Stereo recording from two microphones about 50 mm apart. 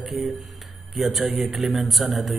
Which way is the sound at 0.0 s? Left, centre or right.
Centre.